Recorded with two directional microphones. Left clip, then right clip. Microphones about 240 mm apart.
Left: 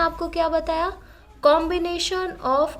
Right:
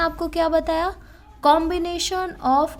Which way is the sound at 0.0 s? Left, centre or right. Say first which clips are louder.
Right 1 dB; right.